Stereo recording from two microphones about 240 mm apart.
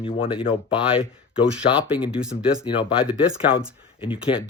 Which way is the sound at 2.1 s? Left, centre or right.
Centre.